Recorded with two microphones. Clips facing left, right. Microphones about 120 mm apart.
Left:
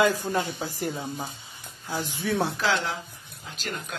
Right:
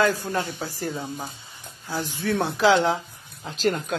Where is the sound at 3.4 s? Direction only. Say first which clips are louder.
Right 11 dB; 40° right (ahead or behind).